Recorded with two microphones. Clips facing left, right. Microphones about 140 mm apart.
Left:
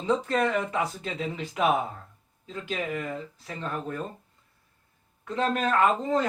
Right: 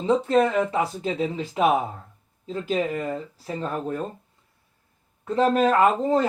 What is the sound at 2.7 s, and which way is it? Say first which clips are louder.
Speech: right 5 dB; 30° right (ahead or behind).